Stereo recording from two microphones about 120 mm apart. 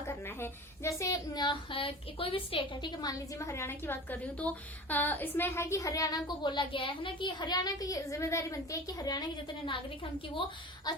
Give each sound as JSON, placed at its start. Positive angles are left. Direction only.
{"t": 0.1, "sound": "a woman's voice", "side_deg": 20}
{"t": 3.0, "sound": "a woman's voice", "side_deg": 30}
{"t": 10.9, "sound": "a sound", "side_deg": 35}